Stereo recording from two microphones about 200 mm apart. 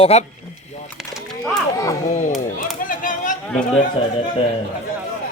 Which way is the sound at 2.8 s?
40° left (ahead or behind).